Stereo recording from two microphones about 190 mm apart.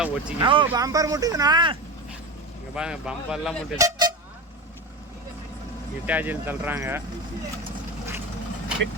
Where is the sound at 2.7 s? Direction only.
5° right (ahead or behind).